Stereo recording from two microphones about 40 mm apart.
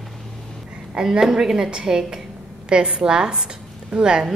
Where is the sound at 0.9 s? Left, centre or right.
Centre.